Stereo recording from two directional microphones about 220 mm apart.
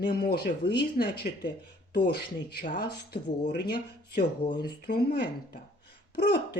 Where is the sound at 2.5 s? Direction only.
35° left (ahead or behind).